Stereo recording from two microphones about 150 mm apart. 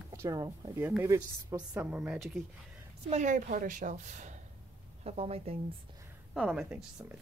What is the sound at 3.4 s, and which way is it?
Speech, 65° right (ahead or behind).